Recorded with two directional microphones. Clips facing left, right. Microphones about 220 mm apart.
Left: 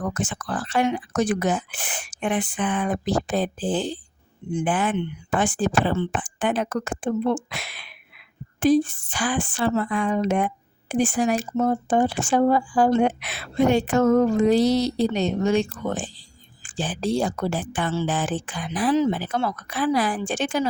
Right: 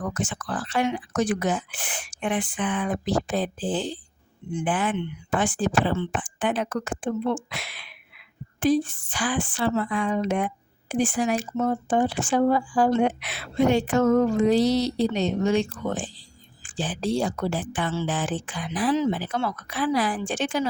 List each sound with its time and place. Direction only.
0.1 s a woman's voice: 45° left (ahead or behind)